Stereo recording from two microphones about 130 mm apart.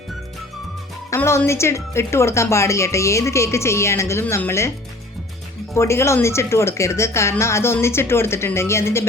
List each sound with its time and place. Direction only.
1.1 s speech: 20° left (ahead or behind)
5.7 s speech: 20° left (ahead or behind)